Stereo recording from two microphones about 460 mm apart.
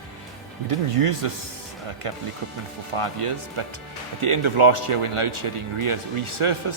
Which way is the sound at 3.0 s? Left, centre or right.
Right.